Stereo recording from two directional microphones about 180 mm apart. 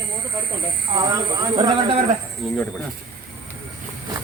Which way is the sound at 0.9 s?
25° right (ahead or behind).